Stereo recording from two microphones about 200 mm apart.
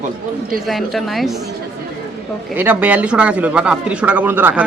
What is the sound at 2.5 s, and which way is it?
Speech, 10° right (ahead or behind).